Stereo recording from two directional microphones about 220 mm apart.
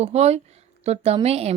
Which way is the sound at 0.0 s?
30° right (ahead or behind).